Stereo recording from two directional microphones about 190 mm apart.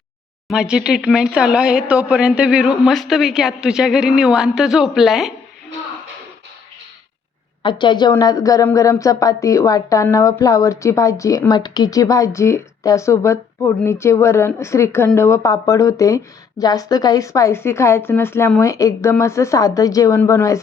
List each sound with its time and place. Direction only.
0.4 s speech: 5° right (ahead or behind)
7.6 s a woman's voice: 25° left (ahead or behind)